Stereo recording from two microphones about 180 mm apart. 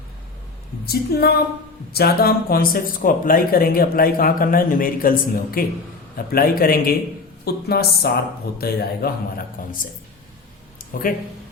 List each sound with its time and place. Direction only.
0.9 s speech: 60° left (ahead or behind)
9.6 s speech: 45° left (ahead or behind)
10.9 s speech: 50° left (ahead or behind)